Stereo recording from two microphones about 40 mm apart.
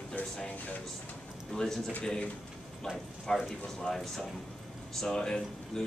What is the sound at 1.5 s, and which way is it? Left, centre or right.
Speech, centre.